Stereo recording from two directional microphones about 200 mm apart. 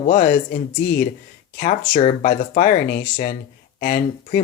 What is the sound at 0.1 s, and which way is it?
Speech, 45° left (ahead or behind).